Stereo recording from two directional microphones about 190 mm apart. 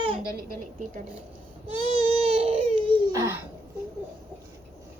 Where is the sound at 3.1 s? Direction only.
15° right (ahead or behind).